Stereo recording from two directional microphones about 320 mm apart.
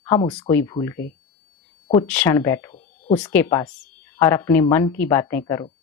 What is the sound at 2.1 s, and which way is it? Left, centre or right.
Speech, centre.